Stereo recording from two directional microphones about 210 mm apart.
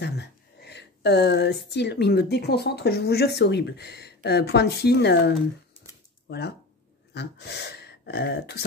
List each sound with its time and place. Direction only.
0.0 s speech: 50° left (ahead or behind)